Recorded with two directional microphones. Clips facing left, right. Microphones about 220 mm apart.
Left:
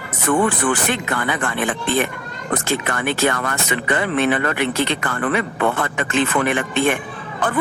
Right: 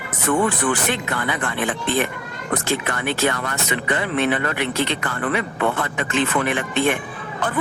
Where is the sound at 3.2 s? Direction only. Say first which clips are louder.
Left 2 dB; 50° left (ahead or behind).